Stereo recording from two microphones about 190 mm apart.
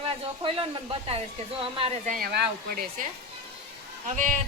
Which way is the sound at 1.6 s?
30° right (ahead or behind).